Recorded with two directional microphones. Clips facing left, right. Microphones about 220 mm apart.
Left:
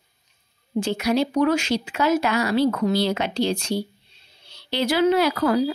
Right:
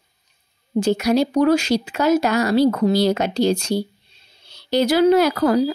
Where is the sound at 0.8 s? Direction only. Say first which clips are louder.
Right 4 dB; 40° right (ahead or behind).